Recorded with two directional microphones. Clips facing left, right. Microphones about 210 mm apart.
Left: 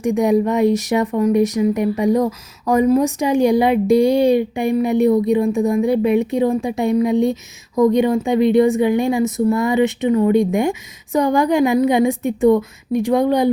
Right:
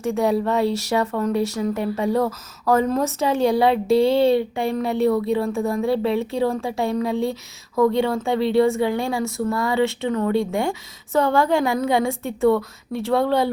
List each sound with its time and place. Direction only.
0.0 s a woman's voice: 15° left (ahead or behind)